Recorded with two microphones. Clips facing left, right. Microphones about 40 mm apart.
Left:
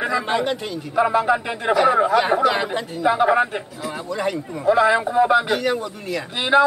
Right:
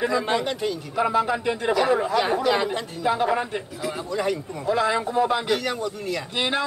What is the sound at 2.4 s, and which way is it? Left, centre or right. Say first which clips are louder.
A man's voice: left 3 dB; centre.